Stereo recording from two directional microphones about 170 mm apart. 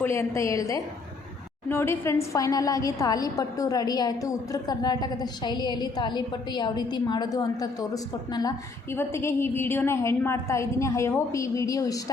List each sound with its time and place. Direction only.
0.0 s a woman's voice: 15° left (ahead or behind)